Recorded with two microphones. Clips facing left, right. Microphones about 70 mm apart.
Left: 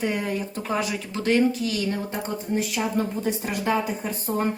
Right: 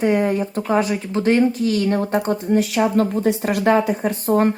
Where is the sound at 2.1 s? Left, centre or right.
Right.